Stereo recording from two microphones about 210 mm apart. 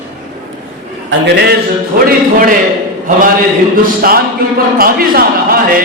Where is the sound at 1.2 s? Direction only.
50° right (ahead or behind).